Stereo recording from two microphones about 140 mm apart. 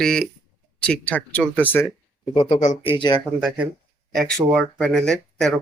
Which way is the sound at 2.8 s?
35° left (ahead or behind).